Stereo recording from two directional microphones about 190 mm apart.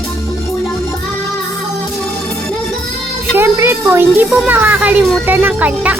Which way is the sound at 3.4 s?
10° right (ahead or behind).